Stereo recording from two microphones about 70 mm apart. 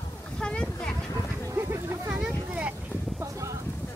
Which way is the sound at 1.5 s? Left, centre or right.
Right.